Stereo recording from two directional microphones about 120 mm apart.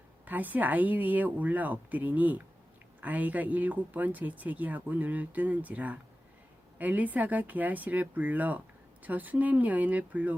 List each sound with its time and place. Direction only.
0.3 s speech: 15° right (ahead or behind)